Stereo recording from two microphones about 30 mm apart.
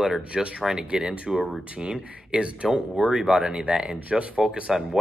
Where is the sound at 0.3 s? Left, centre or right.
Right.